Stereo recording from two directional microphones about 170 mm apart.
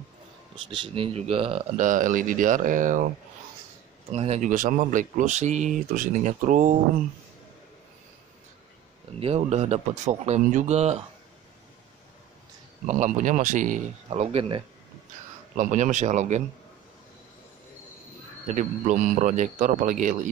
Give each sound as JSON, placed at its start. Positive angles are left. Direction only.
{"t": 0.7, "sound": "speech", "side_deg": -30}
{"t": 1.8, "sound": "speech", "side_deg": -50}
{"t": 4.1, "sound": "speech", "side_deg": -40}
{"t": 9.2, "sound": "speech", "side_deg": -40}
{"t": 12.8, "sound": "speech", "side_deg": -45}
{"t": 18.5, "sound": "speech", "side_deg": -50}